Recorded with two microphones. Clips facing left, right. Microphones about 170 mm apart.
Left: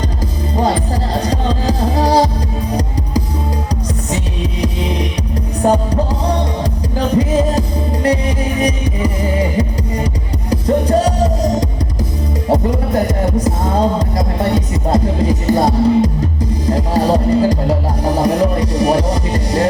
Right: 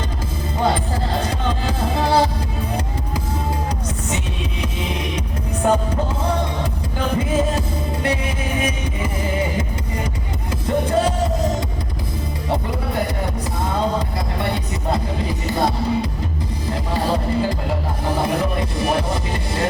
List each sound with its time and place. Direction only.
1.3 s music: 35° left (ahead or behind)
5.6 s music: 35° left (ahead or behind)
8.6 s music: 40° left (ahead or behind)
10.5 s music: 40° left (ahead or behind)
12.5 s music: 45° left (ahead or behind)